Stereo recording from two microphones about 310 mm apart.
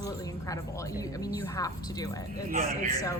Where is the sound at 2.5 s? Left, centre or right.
Right.